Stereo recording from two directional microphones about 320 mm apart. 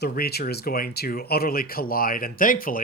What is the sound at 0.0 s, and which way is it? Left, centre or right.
Speech, left.